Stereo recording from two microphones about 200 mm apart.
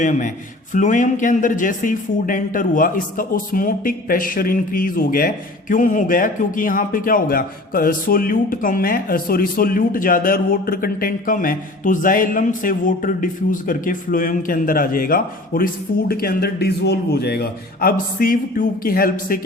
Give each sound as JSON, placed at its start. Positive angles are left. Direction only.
{"t": 0.0, "sound": "a man's voice", "side_deg": 40}